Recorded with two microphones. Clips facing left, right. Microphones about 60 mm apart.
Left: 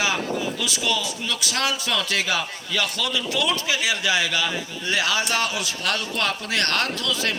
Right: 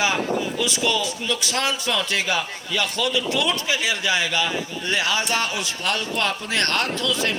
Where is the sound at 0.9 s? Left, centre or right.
Right.